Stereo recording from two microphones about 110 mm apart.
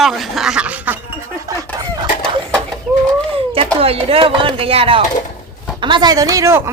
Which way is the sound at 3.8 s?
60° right (ahead or behind).